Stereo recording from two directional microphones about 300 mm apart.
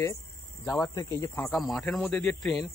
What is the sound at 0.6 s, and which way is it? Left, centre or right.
Speech, centre.